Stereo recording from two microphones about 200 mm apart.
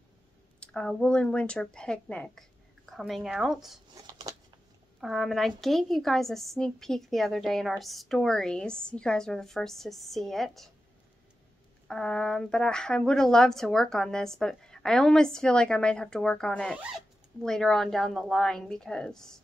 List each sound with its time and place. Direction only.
0.6 s speech: 5° left (ahead or behind)
3.9 s scissors: 20° right (ahead or behind)
5.0 s speech: centre (ahead or behind)
11.9 s speech: 5° left (ahead or behind)